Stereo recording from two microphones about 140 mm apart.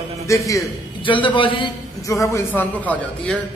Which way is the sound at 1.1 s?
35° left (ahead or behind).